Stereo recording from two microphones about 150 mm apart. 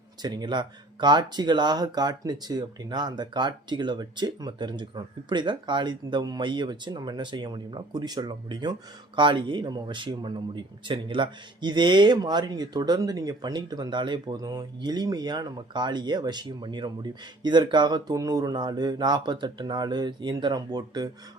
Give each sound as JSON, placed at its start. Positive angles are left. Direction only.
{"t": 0.2, "sound": "speech", "side_deg": -30}